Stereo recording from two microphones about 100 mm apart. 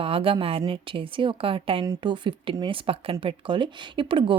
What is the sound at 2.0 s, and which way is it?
Speech, 50° right (ahead or behind).